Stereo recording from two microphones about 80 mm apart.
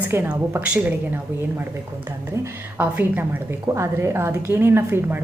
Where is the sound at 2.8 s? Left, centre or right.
Right.